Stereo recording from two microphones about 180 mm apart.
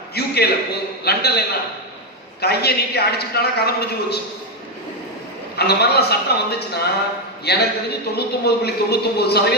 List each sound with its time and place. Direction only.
0.1 s a sound: 65° left (ahead or behind)
1.0 s a man's voice: 65° left (ahead or behind)
5.5 s a man's voice: 65° left (ahead or behind)